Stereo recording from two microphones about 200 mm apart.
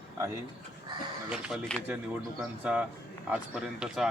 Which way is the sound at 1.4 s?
Centre (ahead or behind).